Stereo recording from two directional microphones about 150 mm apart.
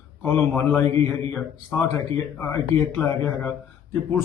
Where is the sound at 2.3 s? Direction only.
15° left (ahead or behind).